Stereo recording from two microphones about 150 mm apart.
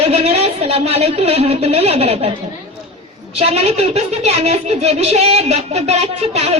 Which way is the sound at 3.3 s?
45° right (ahead or behind).